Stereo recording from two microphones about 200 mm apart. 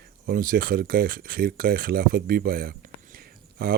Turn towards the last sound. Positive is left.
turn(degrees=-50)  # may be behind; listen again after turning